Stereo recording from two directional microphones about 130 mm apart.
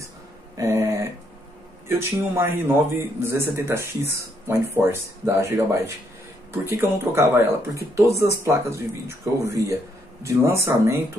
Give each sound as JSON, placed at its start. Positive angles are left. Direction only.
{"t": 0.6, "sound": "speech", "side_deg": -20}